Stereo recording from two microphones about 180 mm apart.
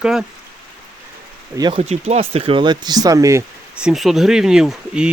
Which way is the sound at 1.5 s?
20° right (ahead or behind).